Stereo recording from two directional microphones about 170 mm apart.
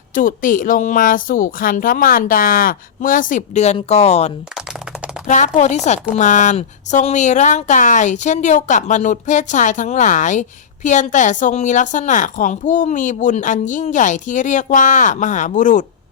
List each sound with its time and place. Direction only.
0.1 s a woman's voice: 55° left (ahead or behind)
4.5 s typing: 5° right (ahead or behind)
5.2 s a woman's voice: 45° left (ahead or behind)